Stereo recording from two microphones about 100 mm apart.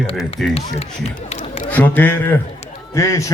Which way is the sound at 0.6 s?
90° left.